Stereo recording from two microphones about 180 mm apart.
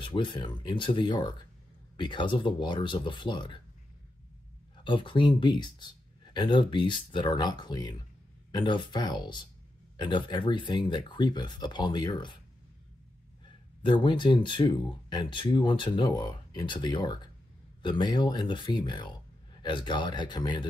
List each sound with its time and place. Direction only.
0.0 s speech: 25° left (ahead or behind)
4.8 s speech: 25° left (ahead or behind)
13.8 s speech: 25° left (ahead or behind)